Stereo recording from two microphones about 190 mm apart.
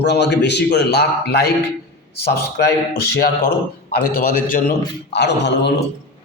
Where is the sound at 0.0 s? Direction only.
65° left (ahead or behind).